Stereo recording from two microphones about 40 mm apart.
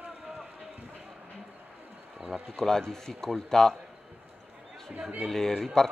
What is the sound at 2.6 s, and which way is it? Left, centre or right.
Speech, centre.